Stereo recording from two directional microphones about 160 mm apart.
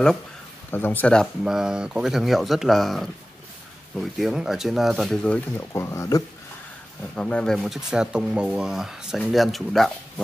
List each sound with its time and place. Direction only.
0.7 s speech: 15° left (ahead or behind)
1.4 s speech: 5° right (ahead or behind)
5.7 s speech: 20° left (ahead or behind)
7.2 s speech: 5° left (ahead or behind)